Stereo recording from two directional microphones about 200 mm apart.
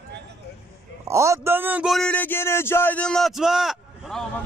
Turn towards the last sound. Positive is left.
turn(degrees=0)  # may be behind; listen again after turning